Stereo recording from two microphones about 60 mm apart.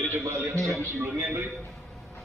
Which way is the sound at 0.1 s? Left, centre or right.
Right.